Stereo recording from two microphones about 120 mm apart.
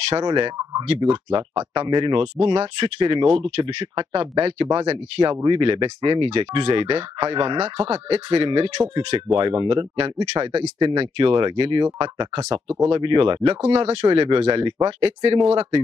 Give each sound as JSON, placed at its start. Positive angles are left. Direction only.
{"t": 0.2, "sound": "speech", "side_deg": -40}
{"t": 2.3, "sound": "speech", "side_deg": -55}